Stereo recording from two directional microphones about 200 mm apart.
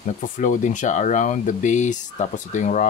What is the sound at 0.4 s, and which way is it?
Speech, 40° left (ahead or behind).